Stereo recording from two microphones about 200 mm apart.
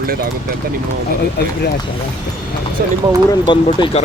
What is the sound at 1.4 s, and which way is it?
Speech, 50° left (ahead or behind).